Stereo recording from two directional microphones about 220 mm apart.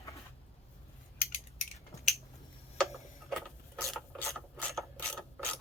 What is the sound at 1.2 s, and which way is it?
Mechanisms, 35° left (ahead or behind).